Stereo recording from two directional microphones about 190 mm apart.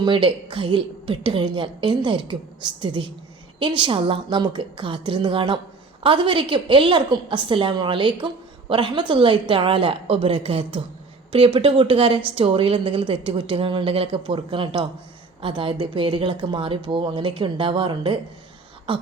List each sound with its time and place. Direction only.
0.0 s a woman's voice: 25° right (ahead or behind)